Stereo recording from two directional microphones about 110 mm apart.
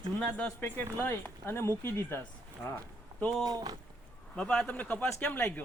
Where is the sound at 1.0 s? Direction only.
20° left (ahead or behind).